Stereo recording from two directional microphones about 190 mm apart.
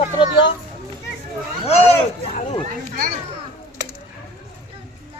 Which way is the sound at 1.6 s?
35° left (ahead or behind).